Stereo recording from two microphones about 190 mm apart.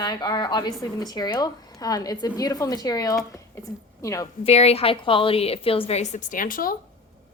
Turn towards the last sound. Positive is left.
turn(degrees=45)  # may be behind; listen again after turning